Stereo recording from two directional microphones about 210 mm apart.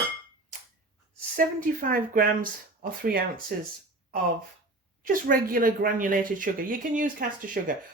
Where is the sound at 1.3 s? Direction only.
40° right (ahead or behind).